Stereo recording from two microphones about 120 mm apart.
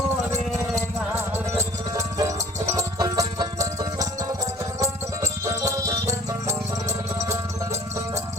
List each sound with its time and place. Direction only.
0.8 s music: 20° right (ahead or behind)